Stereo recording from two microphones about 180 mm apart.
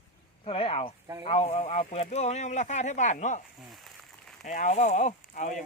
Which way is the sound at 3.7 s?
Centre (ahead or behind).